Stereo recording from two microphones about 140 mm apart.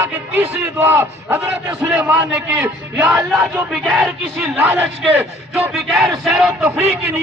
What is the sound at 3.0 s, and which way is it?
Speech, 25° right (ahead or behind).